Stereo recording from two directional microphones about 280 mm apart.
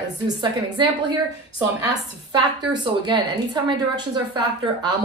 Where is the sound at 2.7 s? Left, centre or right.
Centre.